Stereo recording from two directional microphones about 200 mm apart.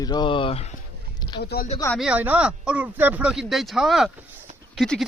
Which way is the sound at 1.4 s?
50° left (ahead or behind).